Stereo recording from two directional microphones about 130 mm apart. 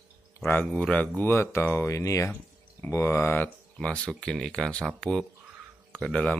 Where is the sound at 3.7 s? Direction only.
5° left (ahead or behind).